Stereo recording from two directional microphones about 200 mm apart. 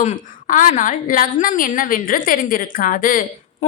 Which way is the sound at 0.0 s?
40° left (ahead or behind).